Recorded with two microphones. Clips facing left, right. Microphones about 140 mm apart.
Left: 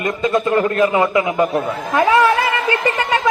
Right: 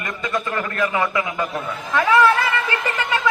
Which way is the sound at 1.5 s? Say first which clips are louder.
Left 5 dB; 40° left (ahead or behind).